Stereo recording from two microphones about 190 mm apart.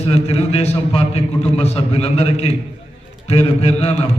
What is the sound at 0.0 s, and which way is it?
A man's voice, 35° left (ahead or behind).